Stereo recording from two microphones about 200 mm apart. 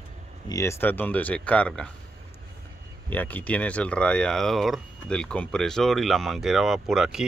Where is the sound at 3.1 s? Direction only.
10° left (ahead or behind).